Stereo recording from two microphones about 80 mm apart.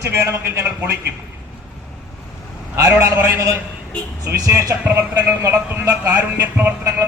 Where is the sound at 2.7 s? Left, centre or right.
Right.